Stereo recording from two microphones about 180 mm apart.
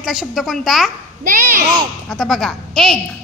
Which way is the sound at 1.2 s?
50° right (ahead or behind).